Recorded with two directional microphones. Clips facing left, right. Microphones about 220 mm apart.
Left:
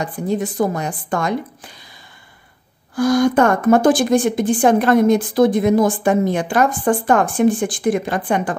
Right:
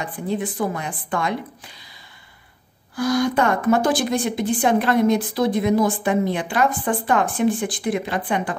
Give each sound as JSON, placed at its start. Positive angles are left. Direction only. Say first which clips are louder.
{"t": 0.0, "sound": "a woman's voice", "louder": "left 4 dB", "side_deg": 40}
{"t": 3.0, "sound": "a woman's voice", "louder": "left 5 dB", "side_deg": 50}